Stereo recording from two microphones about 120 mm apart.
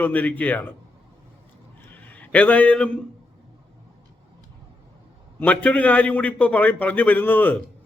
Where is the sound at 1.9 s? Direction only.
15° left (ahead or behind).